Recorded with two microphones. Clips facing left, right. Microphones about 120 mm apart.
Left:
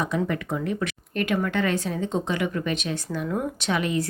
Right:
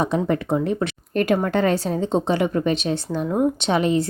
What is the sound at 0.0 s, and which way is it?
Speech, 30° right (ahead or behind).